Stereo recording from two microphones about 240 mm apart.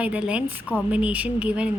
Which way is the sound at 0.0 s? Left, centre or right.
Centre.